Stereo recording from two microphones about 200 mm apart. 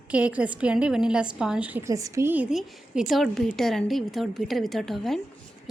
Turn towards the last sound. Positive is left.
turn(degrees=0)  # may be behind; listen again after turning